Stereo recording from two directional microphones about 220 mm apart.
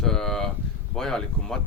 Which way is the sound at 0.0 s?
Centre (ahead or behind).